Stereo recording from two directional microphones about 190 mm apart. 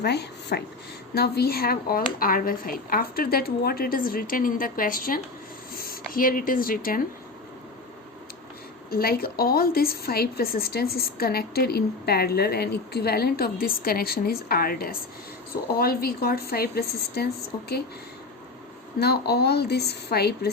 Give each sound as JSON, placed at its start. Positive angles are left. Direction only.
{"t": 0.0, "sound": "a woman's voice", "side_deg": 60}
{"t": 5.7, "sound": "a sound", "side_deg": 50}
{"t": 6.1, "sound": "a woman's voice", "side_deg": 45}
{"t": 8.9, "sound": "a woman's voice", "side_deg": 50}
{"t": 18.9, "sound": "a woman's voice", "side_deg": 55}